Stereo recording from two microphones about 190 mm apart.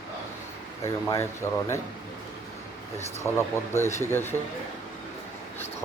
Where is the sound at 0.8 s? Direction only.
15° left (ahead or behind).